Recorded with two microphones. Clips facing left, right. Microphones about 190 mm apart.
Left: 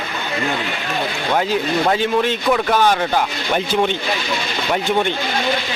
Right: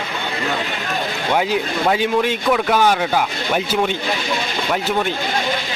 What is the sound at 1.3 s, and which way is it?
Speech, 10° right (ahead or behind).